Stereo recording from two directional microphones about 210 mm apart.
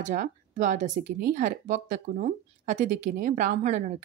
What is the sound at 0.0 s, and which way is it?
Speech, 35° right (ahead or behind).